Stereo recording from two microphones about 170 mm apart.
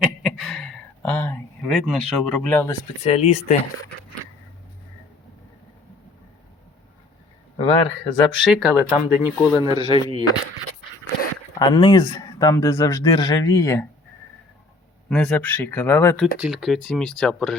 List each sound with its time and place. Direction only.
0.0 s a sound: centre (ahead or behind)
1.7 s speech: centre (ahead or behind)
3.0 s speech: 40° left (ahead or behind)
7.6 s speech: 30° left (ahead or behind)
8.4 s speech: 5° right (ahead or behind)
9.6 s speech: 25° right (ahead or behind)
11.6 s speech: 25° left (ahead or behind)
15.1 s speech: 5° left (ahead or behind)
16.4 s speech: centre (ahead or behind)